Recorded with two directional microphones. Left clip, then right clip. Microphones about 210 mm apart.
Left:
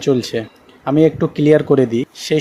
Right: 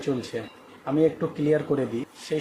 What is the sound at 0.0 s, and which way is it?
Speech, 30° left (ahead or behind).